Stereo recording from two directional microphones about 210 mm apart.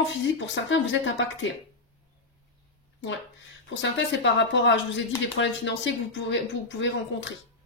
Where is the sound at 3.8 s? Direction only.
55° left (ahead or behind).